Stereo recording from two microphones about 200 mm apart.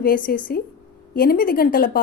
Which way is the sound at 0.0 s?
45° left (ahead or behind).